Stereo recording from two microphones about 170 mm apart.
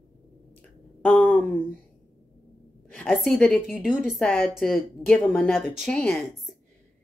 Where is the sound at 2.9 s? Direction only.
10° left (ahead or behind).